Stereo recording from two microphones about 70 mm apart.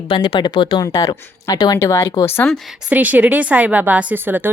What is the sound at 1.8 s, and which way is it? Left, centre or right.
Speech, left.